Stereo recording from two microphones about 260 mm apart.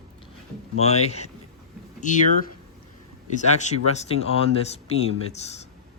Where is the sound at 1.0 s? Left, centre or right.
Left.